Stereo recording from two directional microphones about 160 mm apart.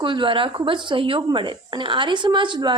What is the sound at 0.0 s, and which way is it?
Speech, 30° right (ahead or behind).